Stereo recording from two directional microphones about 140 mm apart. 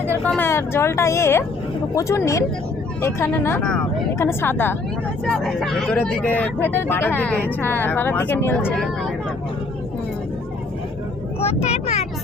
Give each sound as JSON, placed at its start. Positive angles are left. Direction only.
{"t": 0.3, "sound": "speech", "side_deg": 15}
{"t": 5.2, "sound": "speech", "side_deg": 5}
{"t": 11.3, "sound": "speech", "side_deg": 50}